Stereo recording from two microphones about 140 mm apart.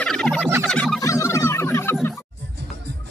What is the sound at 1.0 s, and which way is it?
Music, 20° left (ahead or behind).